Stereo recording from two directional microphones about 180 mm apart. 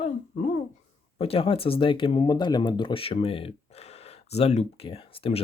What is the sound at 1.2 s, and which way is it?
Speech, 30° left (ahead or behind).